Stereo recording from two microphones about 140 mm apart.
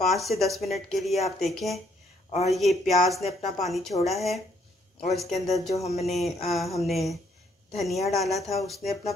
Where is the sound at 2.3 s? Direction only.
50° left (ahead or behind).